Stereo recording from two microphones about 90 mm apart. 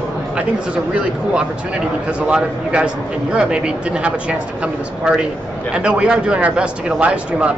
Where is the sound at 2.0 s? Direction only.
10° right (ahead or behind).